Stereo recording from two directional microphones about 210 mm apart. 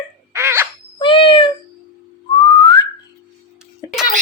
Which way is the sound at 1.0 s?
25° left (ahead or behind).